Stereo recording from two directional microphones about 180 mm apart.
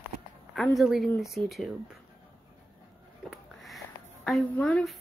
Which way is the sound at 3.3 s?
Centre (ahead or behind).